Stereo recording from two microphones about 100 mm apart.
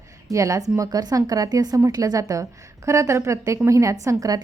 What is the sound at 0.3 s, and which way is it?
A woman's voice, 35° right (ahead or behind).